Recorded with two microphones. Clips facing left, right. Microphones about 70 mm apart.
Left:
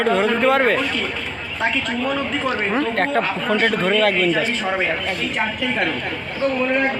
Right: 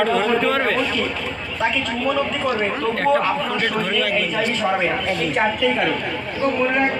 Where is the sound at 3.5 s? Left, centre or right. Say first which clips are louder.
Left 3 dB; left.